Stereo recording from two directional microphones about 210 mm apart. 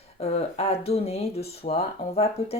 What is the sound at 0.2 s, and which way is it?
Speech, 30° left (ahead or behind).